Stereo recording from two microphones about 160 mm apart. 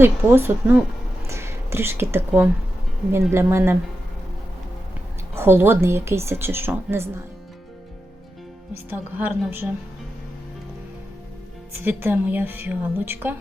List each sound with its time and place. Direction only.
0.0 s a woman's voice: 15° right (ahead or behind)
5.3 s a woman's voice: 15° right (ahead or behind)
8.9 s a woman's voice: 10° right (ahead or behind)
11.8 s a woman's voice: 15° right (ahead or behind)